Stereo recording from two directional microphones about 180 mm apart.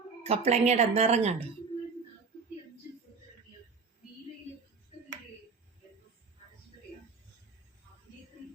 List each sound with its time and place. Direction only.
0.2 s speech: 35° right (ahead or behind)